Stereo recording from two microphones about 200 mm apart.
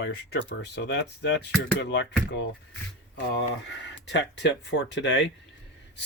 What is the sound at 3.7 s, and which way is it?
Speech, 60° left (ahead or behind).